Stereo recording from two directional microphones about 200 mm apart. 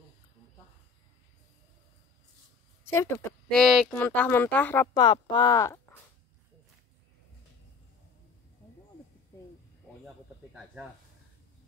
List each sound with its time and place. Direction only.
2.8 s a woman's voice: 15° left (ahead or behind)
3.5 s speech: centre (ahead or behind)
4.9 s speech: 20° left (ahead or behind)
10.0 s snake: 5° right (ahead or behind)